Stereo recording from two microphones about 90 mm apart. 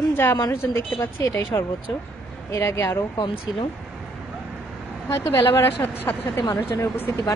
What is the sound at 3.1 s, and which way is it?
Speech, 65° left (ahead or behind).